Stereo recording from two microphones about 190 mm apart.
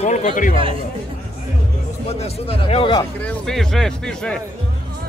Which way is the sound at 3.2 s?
5° left (ahead or behind).